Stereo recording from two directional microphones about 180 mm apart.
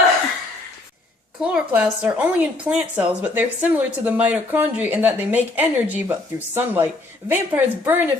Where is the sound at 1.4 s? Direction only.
5° right (ahead or behind).